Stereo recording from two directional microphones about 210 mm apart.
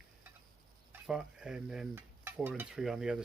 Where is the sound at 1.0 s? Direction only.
5° right (ahead or behind).